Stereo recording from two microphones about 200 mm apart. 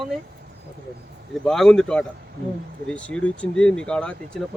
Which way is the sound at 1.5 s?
Centre (ahead or behind).